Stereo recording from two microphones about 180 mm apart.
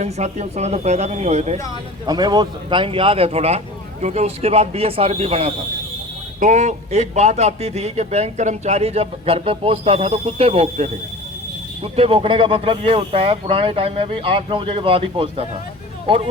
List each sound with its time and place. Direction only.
0.0 s a man's voice: 40° right (ahead or behind)
2.0 s a man's voice: 25° right (ahead or behind)